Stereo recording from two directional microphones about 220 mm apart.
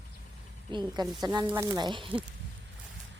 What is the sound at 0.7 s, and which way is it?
Speech, 20° right (ahead or behind).